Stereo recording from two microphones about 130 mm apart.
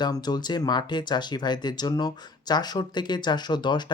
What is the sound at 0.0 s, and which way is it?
Speech, 30° left (ahead or behind).